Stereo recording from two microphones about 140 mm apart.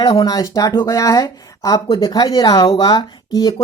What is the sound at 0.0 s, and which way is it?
Speech, 30° left (ahead or behind).